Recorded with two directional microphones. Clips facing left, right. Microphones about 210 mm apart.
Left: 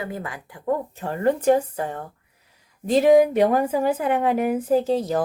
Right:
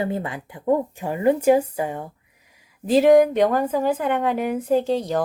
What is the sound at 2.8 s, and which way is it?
A woman's voice, centre (ahead or behind).